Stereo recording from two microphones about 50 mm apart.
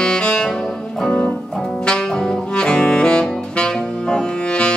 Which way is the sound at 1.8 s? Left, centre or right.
Centre.